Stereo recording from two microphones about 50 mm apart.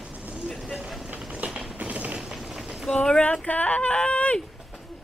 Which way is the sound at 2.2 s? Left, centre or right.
Centre.